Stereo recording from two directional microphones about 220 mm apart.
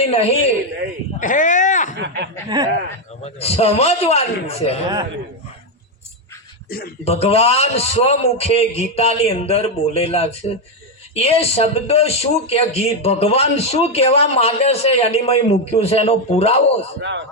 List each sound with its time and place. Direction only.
0.0 s a man's voice: 30° left (ahead or behind)
2.0 s speech: 55° right (ahead or behind)
2.5 s speech: 20° right (ahead or behind)
3.2 s a man's voice: 30° left (ahead or behind)
6.7 s speech: 40° left (ahead or behind)
7.0 s a man's voice: 25° left (ahead or behind)
17.0 s speech: 55° right (ahead or behind)